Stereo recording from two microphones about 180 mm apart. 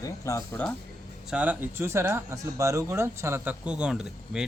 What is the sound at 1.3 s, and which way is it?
Speech, 5° right (ahead or behind).